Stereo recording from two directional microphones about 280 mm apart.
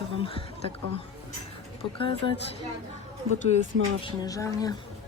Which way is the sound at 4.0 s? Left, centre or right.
Centre.